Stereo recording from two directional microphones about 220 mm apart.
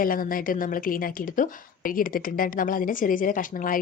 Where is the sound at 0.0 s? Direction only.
40° left (ahead or behind).